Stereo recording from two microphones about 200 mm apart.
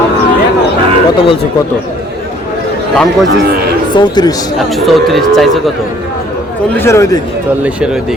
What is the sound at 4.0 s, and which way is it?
Speech, 20° left (ahead or behind).